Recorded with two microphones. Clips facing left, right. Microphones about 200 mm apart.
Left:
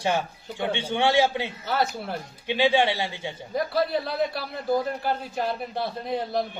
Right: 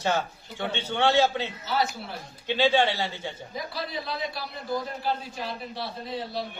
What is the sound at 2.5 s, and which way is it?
Speech, 15° left (ahead or behind).